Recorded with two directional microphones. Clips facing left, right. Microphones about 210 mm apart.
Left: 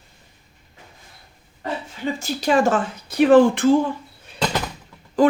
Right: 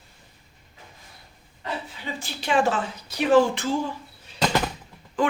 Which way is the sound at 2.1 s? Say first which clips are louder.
Left 4 dB; 40° left (ahead or behind).